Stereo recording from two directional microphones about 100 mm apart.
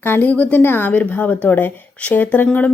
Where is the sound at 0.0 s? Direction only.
20° left (ahead or behind).